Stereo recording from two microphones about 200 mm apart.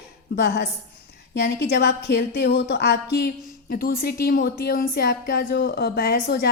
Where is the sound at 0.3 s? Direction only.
55° left (ahead or behind).